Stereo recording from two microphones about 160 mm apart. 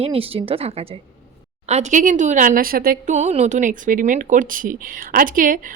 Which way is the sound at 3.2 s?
45° right (ahead or behind).